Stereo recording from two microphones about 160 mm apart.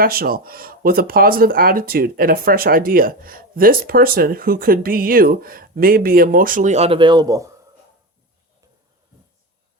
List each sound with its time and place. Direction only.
0.0 s speech: 65° right (ahead or behind); by 7.5 s 20° right (ahead or behind)